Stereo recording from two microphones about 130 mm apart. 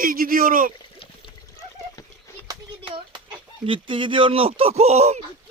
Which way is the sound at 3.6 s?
40° right (ahead or behind).